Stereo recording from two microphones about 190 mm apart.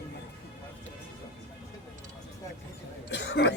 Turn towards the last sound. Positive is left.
turn(degrees=65)  # may be behind; listen again after turning